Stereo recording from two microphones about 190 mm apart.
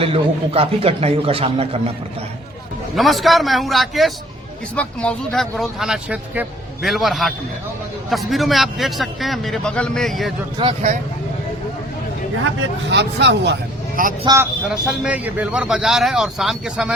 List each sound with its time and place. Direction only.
0.0 s a man's voice: 30° right (ahead or behind)
2.9 s speech: centre (ahead or behind)
10.6 s a man's voice: 25° right (ahead or behind)
12.5 s speech: 65° right (ahead or behind)
14.3 s a man's voice: 20° right (ahead or behind)
14.8 s speech: 5° right (ahead or behind)